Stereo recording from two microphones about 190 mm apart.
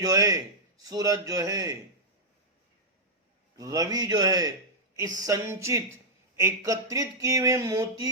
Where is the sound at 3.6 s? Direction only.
20° right (ahead or behind).